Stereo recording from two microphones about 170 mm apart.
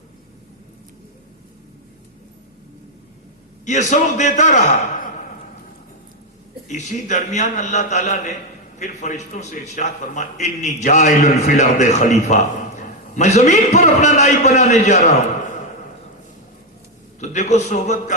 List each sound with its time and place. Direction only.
3.7 s a man's voice: 45° left (ahead or behind)
6.7 s a man's voice: 45° left (ahead or behind)
17.2 s a man's voice: 45° left (ahead or behind)